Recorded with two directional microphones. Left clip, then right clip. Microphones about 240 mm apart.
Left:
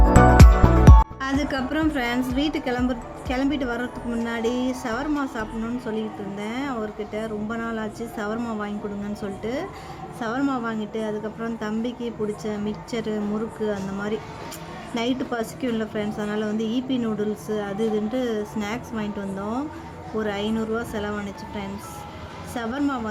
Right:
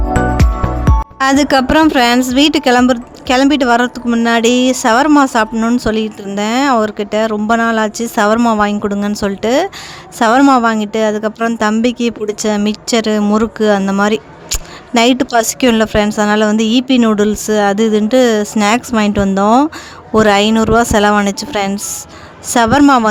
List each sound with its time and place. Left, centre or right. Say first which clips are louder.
0.9 s music: right 2 dB; centre
1.2 s a woman's voice: right 15 dB; right